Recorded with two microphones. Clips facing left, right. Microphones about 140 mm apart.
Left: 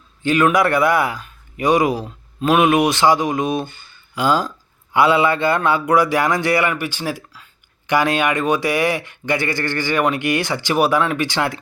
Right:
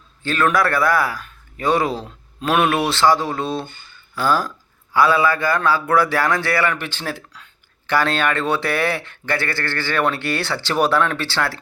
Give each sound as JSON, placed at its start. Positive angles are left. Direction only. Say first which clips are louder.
{"t": 0.2, "sound": "a man's voice", "louder": "left 3 dB", "side_deg": 15}
{"t": 2.0, "sound": "speech", "louder": "left 4 dB", "side_deg": 5}
{"t": 2.7, "sound": "speech", "louder": "left 2 dB", "side_deg": 15}